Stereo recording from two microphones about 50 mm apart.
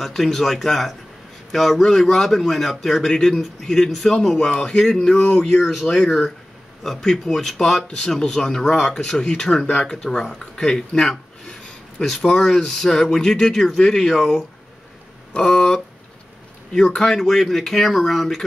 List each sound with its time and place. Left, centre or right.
0.0 s a man's voice: centre
6.0 s speech: centre
6.8 s a man's voice: centre
15.3 s a sound: centre
16.7 s a man's voice: centre